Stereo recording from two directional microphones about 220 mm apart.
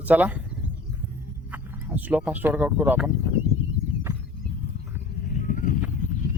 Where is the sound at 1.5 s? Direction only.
10° right (ahead or behind).